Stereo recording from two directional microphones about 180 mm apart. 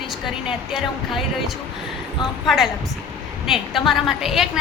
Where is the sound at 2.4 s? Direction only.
Centre (ahead or behind).